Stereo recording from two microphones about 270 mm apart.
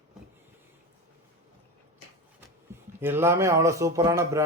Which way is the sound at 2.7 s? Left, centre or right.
Centre.